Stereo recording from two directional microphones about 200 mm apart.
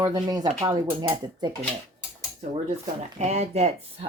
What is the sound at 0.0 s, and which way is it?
Speech, 20° right (ahead or behind).